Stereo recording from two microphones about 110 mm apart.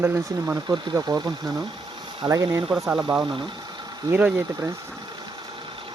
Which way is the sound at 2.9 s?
5° right (ahead or behind).